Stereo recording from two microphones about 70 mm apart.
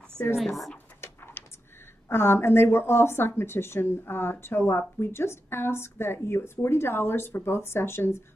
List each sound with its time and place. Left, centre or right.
0.4 s speech: centre
1.0 s a sound: left
2.0 s speech: left